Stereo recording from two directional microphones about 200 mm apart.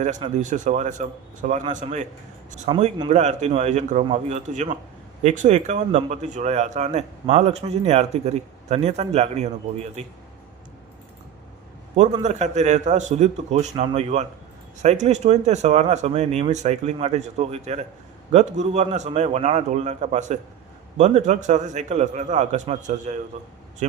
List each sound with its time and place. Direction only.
0.0 s speech: 35° right (ahead or behind)
11.9 s speech: 35° right (ahead or behind)